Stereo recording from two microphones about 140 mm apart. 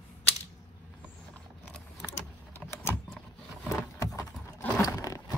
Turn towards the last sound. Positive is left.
turn(degrees=25)  # may be behind; listen again after turning